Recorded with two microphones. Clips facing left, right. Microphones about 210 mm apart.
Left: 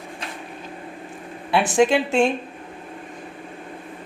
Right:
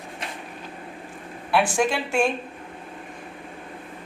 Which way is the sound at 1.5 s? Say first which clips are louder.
Left 4 dB; 20° left (ahead or behind).